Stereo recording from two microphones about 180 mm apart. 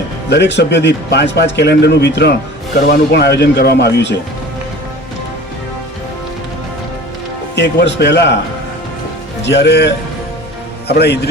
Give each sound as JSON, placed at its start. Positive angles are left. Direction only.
{"t": 0.3, "sound": "a man's voice", "side_deg": 70}
{"t": 7.5, "sound": "a man's voice", "side_deg": 70}
{"t": 9.4, "sound": "a man's voice", "side_deg": 70}